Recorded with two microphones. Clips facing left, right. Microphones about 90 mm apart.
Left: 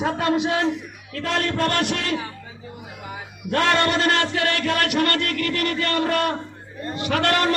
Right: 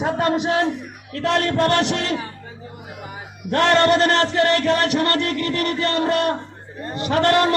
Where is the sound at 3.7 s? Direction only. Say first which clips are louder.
Right 4 dB; 35° right (ahead or behind).